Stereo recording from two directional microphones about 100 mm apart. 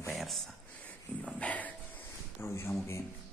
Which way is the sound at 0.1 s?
Centre (ahead or behind).